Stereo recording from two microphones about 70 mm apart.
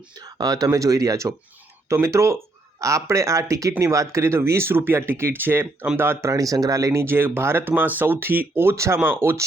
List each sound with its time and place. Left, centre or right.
0.2 s speech: right
6.3 s speech: right
7.0 s speech: right